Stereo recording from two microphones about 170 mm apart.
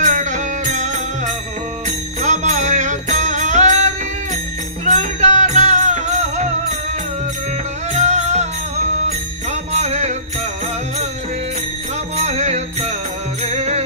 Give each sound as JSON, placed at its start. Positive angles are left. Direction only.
{"t": 0.0, "sound": "music", "side_deg": -45}
{"t": 7.9, "sound": "music", "side_deg": -40}
{"t": 12.2, "sound": "music", "side_deg": -40}